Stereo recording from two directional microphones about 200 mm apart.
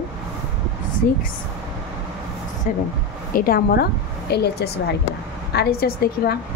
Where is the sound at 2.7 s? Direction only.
40° left (ahead or behind).